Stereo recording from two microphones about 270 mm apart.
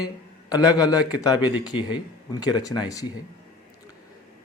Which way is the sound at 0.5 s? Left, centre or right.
Centre.